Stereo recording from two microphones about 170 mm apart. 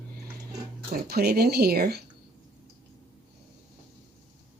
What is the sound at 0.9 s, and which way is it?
Speech, 70° right (ahead or behind).